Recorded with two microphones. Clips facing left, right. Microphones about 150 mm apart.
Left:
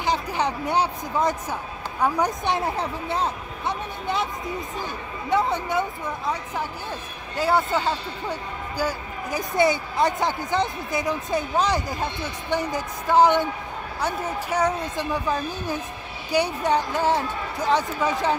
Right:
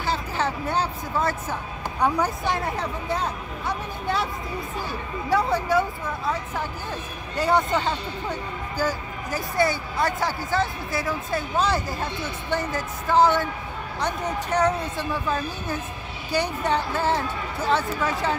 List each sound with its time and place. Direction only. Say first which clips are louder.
0.0 s speech: left 2 dB; 15° left (ahead or behind)
2.2 s speech: left 2 dB; 25° left (ahead or behind)
5.3 s speech: right 1 dB; 20° left (ahead or behind)
7.3 s speech: even; 5° left (ahead or behind)